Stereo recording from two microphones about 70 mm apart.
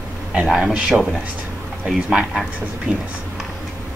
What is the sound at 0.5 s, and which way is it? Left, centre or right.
Speech, centre.